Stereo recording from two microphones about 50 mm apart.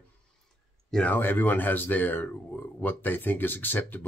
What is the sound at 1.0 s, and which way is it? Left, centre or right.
Speech, left.